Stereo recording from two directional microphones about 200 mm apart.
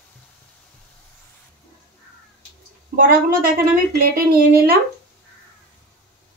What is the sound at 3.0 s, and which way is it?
Speech, 45° right (ahead or behind).